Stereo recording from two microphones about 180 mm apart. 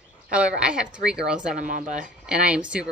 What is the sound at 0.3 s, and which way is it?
Speech, 5° right (ahead or behind).